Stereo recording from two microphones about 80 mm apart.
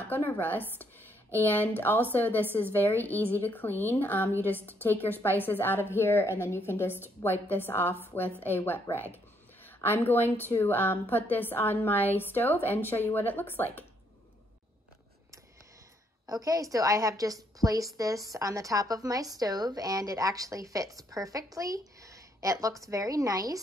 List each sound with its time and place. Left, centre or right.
0.0 s a woman's voice: left
9.8 s a woman's voice: left
16.3 s a woman's voice: right